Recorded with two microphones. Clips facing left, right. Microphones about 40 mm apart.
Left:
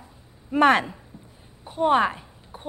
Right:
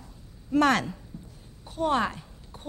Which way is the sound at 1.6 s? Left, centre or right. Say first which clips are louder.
Left 6 dB; left.